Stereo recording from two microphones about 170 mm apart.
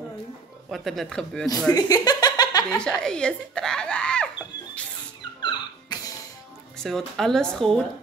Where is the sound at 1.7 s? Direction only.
20° left (ahead or behind).